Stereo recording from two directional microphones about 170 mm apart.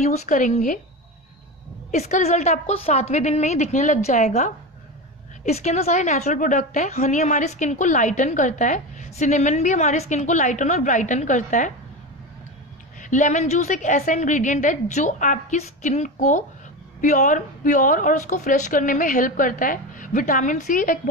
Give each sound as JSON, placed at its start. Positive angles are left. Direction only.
{"t": 0.0, "sound": "a woman's voice", "side_deg": 40}
{"t": 1.9, "sound": "a woman's voice", "side_deg": 45}
{"t": 13.0, "sound": "a woman's voice", "side_deg": 45}